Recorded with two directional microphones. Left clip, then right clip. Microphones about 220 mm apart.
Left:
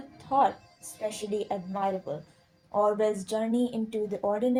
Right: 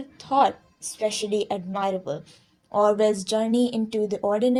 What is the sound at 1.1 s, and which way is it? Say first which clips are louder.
A woman's voice: right 5 dB; 30° right (ahead or behind).